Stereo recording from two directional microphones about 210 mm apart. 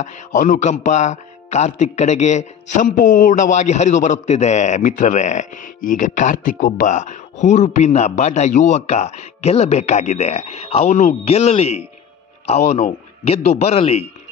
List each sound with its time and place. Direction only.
0.0 s a man's voice: 40° left (ahead or behind)